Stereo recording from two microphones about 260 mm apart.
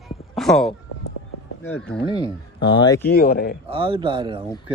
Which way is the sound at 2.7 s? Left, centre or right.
Centre.